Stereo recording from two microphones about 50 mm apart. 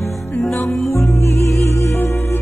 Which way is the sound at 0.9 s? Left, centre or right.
Left.